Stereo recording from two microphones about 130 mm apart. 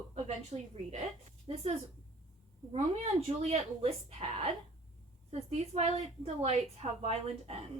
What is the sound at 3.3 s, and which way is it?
A woman's voice, 50° right (ahead or behind).